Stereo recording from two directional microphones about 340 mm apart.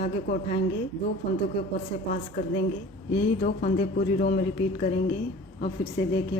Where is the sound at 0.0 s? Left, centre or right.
Left.